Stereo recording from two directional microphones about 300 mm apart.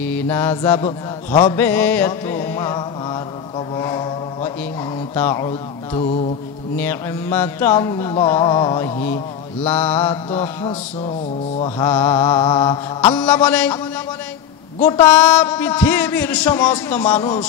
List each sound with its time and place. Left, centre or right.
0.0 s mantra: centre
1.4 s music: centre
5.1 s mantra: centre
10.3 s speech: centre
11.6 s mantra: centre
14.8 s speech: centre